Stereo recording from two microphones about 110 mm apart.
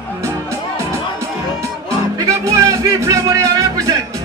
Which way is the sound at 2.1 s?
30° right (ahead or behind).